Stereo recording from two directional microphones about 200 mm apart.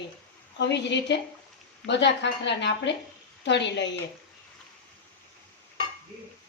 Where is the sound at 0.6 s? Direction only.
60° left (ahead or behind).